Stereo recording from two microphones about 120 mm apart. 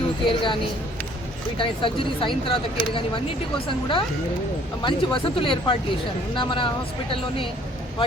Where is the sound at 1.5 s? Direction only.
45° left (ahead or behind).